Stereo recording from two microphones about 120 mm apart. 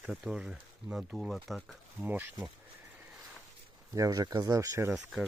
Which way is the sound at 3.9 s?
30° right (ahead or behind).